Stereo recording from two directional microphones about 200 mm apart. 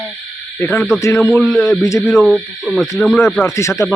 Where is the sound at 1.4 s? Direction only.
Centre (ahead or behind).